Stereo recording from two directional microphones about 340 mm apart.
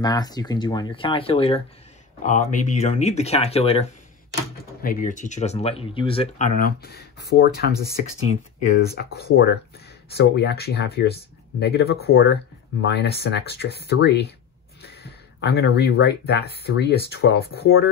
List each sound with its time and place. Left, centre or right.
0.0 s speech: centre; by 14.2 s left
15.4 s speech: left